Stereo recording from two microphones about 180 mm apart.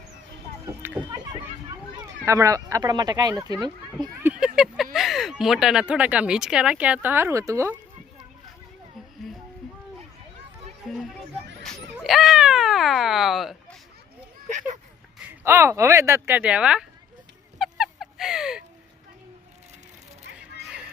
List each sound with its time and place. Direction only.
0.6 s a sound: 15° right (ahead or behind)
2.0 s speech: 20° right (ahead or behind)
4.0 s speech: 10° right (ahead or behind)
10.8 s run: centre (ahead or behind)
11.6 s a sound: centre (ahead or behind)
15.3 s speech: 15° right (ahead or behind)
17.6 s fowl: centre (ahead or behind)